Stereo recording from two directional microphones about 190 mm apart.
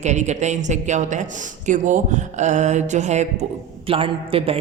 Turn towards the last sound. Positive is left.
turn(degrees=-30)  # may be behind; listen again after turning